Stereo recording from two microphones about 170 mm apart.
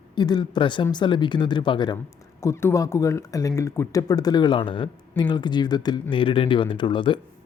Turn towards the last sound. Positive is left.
turn(degrees=30)  # may be behind; listen again after turning